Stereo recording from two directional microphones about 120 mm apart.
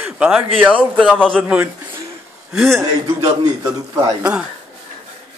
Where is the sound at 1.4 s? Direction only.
10° right (ahead or behind).